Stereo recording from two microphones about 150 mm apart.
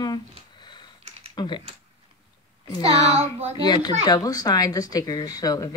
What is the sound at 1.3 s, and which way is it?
Speech, 30° left (ahead or behind).